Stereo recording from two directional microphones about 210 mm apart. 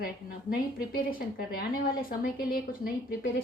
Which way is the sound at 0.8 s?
45° left (ahead or behind).